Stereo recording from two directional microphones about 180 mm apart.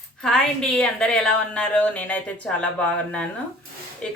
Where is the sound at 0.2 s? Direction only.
5° left (ahead or behind).